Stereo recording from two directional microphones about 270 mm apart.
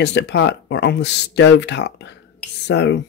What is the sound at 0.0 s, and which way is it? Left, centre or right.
Speech, left.